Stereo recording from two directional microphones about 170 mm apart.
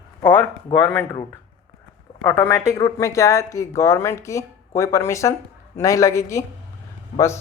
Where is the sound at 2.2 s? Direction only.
10° left (ahead or behind).